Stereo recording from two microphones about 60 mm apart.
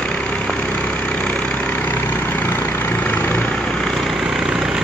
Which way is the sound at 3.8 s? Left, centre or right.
Centre.